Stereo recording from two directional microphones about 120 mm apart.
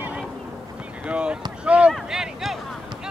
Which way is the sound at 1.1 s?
10° right (ahead or behind).